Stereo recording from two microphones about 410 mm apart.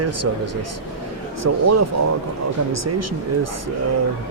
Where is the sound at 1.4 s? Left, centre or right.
Right.